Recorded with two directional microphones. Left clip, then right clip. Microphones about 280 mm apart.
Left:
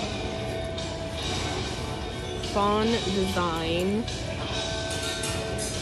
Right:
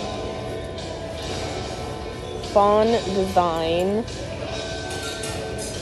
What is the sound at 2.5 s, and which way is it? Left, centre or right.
Speech, centre.